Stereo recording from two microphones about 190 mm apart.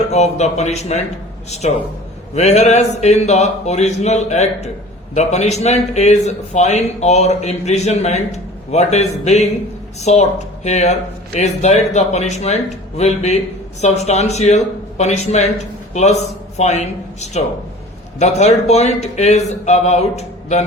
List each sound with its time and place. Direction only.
0.1 s a man's voice: 35° left (ahead or behind)
2.3 s a man's voice: 35° left (ahead or behind)